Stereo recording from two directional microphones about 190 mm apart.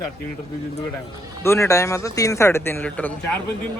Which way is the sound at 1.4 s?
15° left (ahead or behind).